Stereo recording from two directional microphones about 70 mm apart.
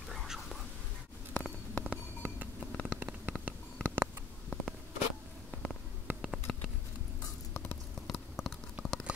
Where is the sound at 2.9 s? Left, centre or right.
Right.